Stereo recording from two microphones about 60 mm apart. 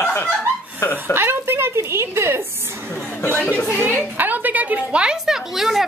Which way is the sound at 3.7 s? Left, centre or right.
Right.